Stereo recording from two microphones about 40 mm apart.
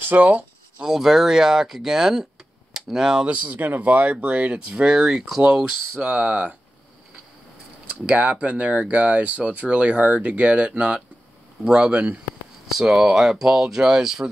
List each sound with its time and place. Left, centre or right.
0.0 s speech: right
0.8 s speech: centre
3.3 s speech: right
3.5 s speech: right
4.8 s speech: centre
5.4 s speech: right
8.1 s speech: right
12.6 s speech: centre